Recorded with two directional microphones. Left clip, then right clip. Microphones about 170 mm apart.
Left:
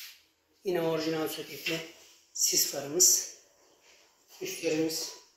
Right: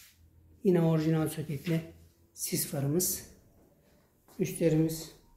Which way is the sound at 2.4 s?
10° right (ahead or behind).